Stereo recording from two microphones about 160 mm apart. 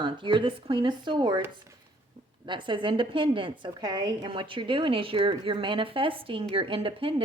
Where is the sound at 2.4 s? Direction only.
30° right (ahead or behind).